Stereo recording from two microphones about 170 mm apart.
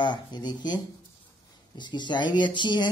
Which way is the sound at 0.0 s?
25° left (ahead or behind).